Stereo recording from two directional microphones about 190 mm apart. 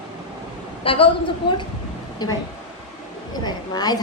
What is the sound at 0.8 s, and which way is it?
Speech, 30° left (ahead or behind).